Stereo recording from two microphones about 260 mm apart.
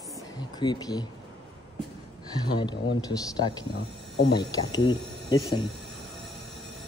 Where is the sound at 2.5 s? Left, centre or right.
Centre.